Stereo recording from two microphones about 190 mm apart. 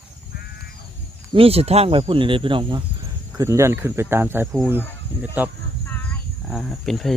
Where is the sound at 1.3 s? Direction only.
30° right (ahead or behind).